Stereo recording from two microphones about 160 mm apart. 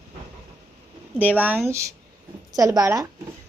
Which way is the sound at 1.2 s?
10° right (ahead or behind).